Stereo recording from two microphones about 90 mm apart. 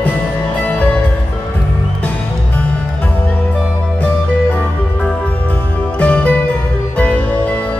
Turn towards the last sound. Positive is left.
turn(degrees=15)  # may be behind; listen again after turning